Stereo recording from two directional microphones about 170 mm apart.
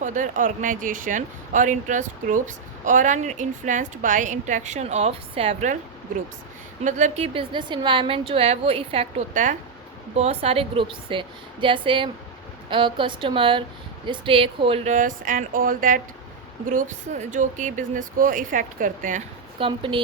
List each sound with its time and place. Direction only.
0.0 s a woman's voice: 50° right (ahead or behind)
6.8 s a woman's voice: 45° right (ahead or behind)
14.9 s a woman's voice: 50° right (ahead or behind)
19.5 s a woman's voice: 30° right (ahead or behind)